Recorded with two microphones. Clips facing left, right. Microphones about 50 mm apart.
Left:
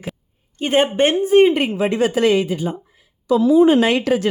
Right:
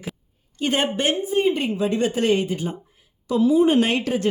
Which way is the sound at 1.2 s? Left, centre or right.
Left.